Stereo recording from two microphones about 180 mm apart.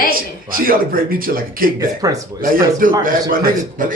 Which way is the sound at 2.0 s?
20° right (ahead or behind).